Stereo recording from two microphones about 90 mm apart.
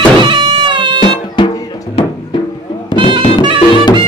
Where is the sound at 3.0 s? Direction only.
70° right (ahead or behind).